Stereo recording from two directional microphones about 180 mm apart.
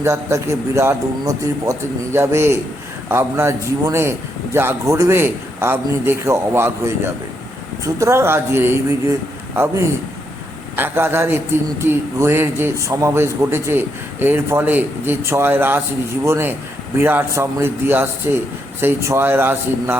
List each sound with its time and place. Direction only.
0.0 s speech: 15° right (ahead or behind)